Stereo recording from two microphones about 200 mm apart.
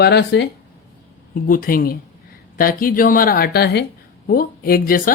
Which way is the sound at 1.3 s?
45° left (ahead or behind).